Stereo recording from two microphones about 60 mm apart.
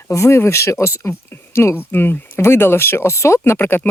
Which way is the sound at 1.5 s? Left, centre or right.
Left.